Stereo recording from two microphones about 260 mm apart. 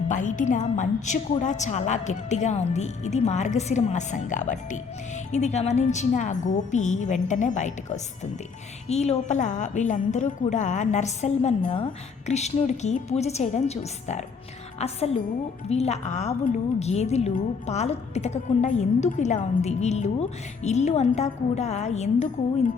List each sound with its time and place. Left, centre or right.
0.1 s a woman's voice: left